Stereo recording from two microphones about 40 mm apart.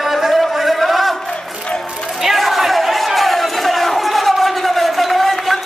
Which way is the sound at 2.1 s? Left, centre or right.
Centre.